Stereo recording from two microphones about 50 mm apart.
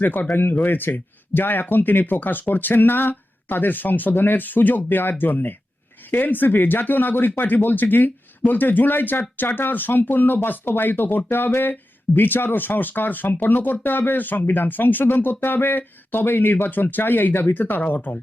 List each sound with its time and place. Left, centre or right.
0.0 s speech: left